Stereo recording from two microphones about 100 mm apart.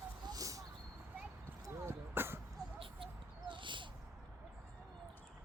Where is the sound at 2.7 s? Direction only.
55° right (ahead or behind).